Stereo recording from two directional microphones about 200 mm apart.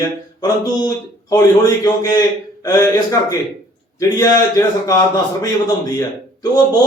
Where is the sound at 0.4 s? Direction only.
20° left (ahead or behind).